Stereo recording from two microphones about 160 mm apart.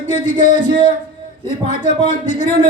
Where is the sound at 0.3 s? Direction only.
50° left (ahead or behind).